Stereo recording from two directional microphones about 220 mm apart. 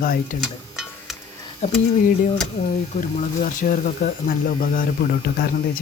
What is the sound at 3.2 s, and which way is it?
Speech, 35° left (ahead or behind).